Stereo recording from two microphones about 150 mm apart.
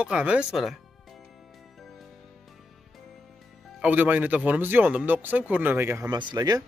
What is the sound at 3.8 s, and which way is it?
Speech, 10° right (ahead or behind).